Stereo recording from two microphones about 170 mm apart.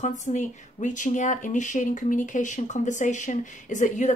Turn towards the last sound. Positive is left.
turn(degrees=45)  # may be behind; listen again after turning